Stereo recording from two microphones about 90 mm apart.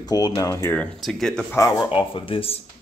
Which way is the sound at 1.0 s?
5° left (ahead or behind).